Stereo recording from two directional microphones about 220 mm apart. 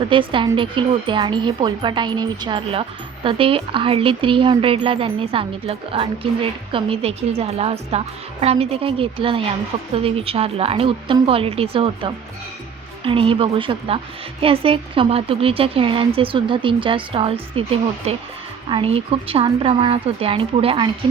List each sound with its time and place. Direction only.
0.1 s speech: 25° right (ahead or behind)